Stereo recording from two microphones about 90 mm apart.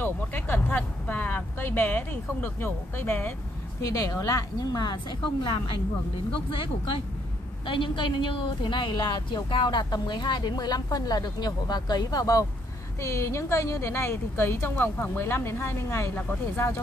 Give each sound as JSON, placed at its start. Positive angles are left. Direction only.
{"t": 0.0, "sound": "speech", "side_deg": 20}
{"t": 3.8, "sound": "a woman's voice", "side_deg": 40}
{"t": 7.6, "sound": "a woman's voice", "side_deg": 65}
{"t": 13.0, "sound": "a woman's voice", "side_deg": 30}